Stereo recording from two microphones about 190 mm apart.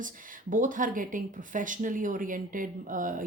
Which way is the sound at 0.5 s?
45° right (ahead or behind).